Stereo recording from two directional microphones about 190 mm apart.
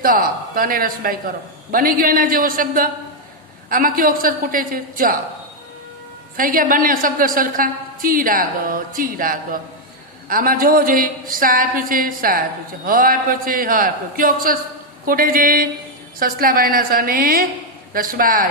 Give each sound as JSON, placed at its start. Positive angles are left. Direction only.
{"t": 0.0, "sound": "a woman's voice", "side_deg": -50}
{"t": 6.3, "sound": "a woman's voice", "side_deg": -50}